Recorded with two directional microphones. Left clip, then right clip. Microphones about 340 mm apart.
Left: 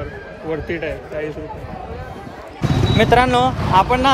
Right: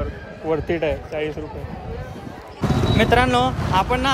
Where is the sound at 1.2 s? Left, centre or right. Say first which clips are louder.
Left 3 dB; centre.